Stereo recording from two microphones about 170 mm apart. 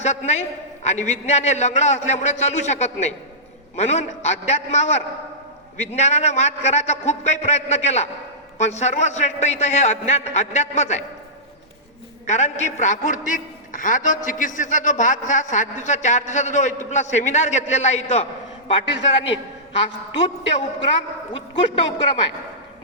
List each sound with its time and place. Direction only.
0.0 s a man's voice: 40° left (ahead or behind)
12.2 s a man's voice: 45° left (ahead or behind)
19.3 s a man's voice: 35° left (ahead or behind)